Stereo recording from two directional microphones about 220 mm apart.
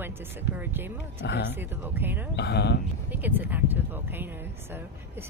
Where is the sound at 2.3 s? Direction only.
50° left (ahead or behind).